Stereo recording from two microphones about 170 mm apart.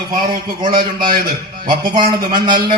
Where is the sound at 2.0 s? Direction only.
30° right (ahead or behind).